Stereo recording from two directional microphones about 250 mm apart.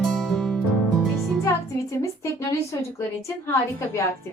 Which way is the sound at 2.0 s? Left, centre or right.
Centre.